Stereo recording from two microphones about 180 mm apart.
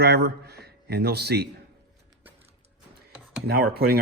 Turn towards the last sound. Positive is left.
turn(degrees=-60)  # may be behind; listen again after turning